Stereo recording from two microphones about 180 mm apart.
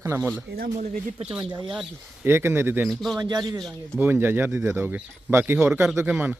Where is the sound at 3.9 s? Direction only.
10° right (ahead or behind).